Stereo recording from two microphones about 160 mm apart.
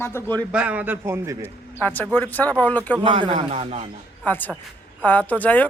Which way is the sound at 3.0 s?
35° right (ahead or behind).